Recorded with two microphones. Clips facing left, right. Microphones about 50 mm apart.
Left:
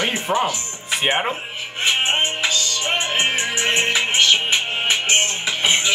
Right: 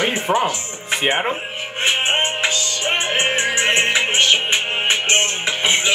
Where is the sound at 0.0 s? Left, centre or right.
Right.